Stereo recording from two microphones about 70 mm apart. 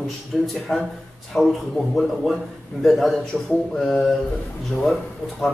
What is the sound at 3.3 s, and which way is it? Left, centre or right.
Speech, centre.